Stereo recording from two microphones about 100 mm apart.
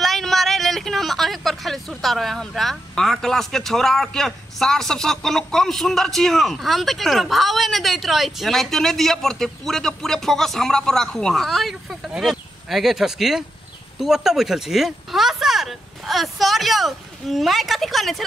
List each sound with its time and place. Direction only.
0.0 s speech: centre (ahead or behind)